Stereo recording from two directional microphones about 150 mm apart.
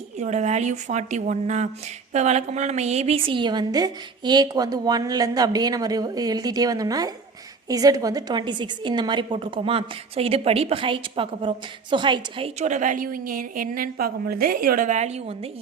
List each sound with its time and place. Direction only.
0.2 s a woman's voice: 50° right (ahead or behind); by 12.5 s 30° right (ahead or behind)
12.5 s a woman's voice: 55° right (ahead or behind)